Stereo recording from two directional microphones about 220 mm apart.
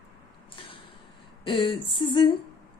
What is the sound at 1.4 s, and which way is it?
Speech, 25° left (ahead or behind).